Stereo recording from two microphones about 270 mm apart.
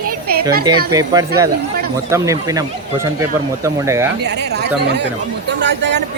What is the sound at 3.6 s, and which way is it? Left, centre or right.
Speech, centre.